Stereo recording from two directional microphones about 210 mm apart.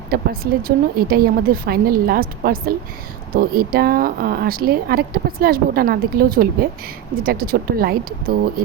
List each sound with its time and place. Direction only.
0.1 s speech: 45° right (ahead or behind)